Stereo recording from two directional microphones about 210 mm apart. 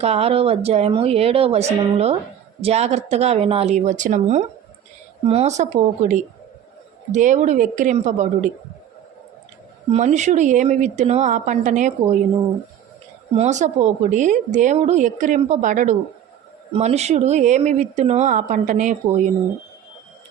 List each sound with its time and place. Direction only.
0.0 s speech: 30° right (ahead or behind)
9.9 s speech: 35° right (ahead or behind)
13.3 s speech: 35° right (ahead or behind)